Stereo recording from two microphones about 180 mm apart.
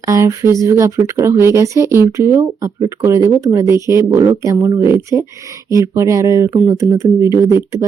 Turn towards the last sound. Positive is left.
turn(degrees=-15)  # may be behind; listen again after turning